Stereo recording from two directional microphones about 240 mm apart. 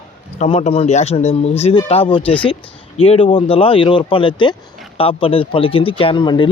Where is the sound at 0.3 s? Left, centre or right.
Left.